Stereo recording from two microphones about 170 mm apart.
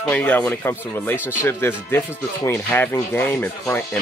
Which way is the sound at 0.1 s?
10° left (ahead or behind).